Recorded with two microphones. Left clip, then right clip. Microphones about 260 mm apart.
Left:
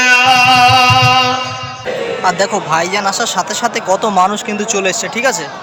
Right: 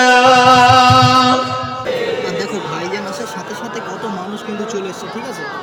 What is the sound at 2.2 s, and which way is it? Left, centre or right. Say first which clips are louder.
Speech: left 7 dB; centre.